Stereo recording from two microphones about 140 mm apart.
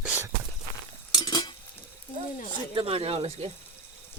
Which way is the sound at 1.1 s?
30° left (ahead or behind).